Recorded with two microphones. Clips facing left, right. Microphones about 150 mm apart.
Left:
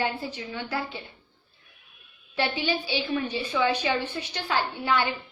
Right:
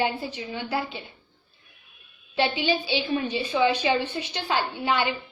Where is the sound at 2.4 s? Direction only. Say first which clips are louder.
Right 3 dB; 20° right (ahead or behind).